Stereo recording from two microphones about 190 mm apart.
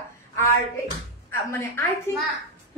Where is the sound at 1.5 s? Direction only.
15° left (ahead or behind).